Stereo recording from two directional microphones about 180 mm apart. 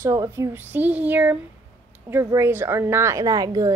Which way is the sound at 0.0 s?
15° right (ahead or behind).